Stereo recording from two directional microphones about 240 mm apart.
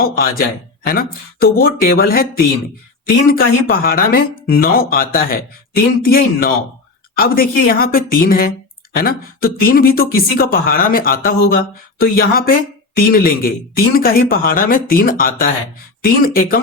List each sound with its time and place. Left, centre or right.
0.0 s speech: left